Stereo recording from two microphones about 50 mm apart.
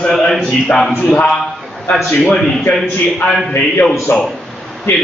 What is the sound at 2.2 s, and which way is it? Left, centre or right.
Speech, centre.